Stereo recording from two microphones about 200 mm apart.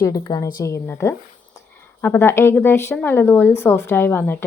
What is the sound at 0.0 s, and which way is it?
A woman's voice, 20° left (ahead or behind).